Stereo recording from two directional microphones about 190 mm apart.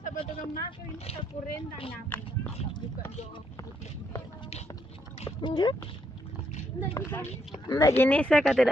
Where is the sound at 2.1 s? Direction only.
10° left (ahead or behind).